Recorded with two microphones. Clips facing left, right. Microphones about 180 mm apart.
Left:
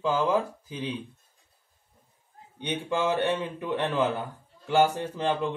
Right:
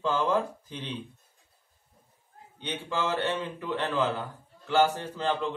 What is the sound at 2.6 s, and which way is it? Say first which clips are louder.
A man's voice: left 4 dB; 15° left (ahead or behind).